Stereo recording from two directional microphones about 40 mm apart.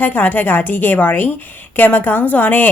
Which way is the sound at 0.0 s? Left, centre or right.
Left.